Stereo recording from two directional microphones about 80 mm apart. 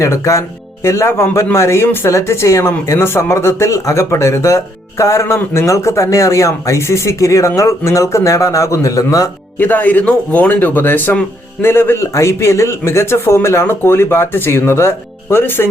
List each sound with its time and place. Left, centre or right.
0.0 s speech: left
9.6 s speech: left